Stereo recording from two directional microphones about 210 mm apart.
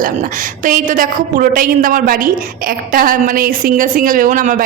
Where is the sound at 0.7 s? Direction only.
40° right (ahead or behind).